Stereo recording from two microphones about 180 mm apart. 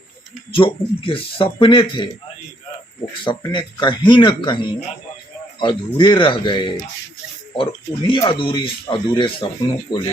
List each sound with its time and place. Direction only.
0.5 s speech: 30° left (ahead or behind)
3.2 s speech: 25° left (ahead or behind)